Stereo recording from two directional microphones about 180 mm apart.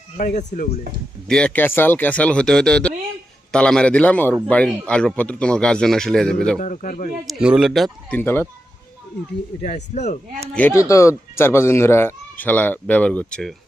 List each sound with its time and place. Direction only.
0.2 s speech: 45° left (ahead or behind)
1.3 s speech: 5° left (ahead or behind)
6.6 s speech: 45° left (ahead or behind)
7.3 s speech: 5° right (ahead or behind)
8.2 s speech: 10° left (ahead or behind)
9.6 s a man's voice: 40° left (ahead or behind)
10.5 s speech: 10° left (ahead or behind)